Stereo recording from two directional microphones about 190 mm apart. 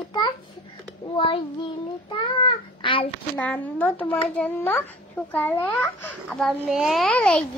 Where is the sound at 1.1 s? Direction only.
25° left (ahead or behind).